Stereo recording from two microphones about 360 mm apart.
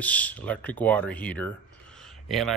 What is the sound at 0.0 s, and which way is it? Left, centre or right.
Speech, centre.